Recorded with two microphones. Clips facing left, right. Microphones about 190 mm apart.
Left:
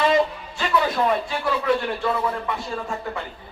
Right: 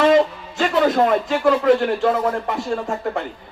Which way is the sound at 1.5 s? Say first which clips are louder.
Right 7 dB; 50° right (ahead or behind).